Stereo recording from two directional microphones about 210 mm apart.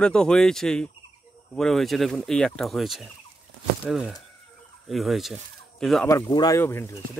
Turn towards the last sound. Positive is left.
turn(degrees=10)  # may be behind; listen again after turning